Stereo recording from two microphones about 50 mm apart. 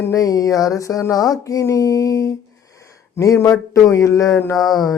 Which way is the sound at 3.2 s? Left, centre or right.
Left.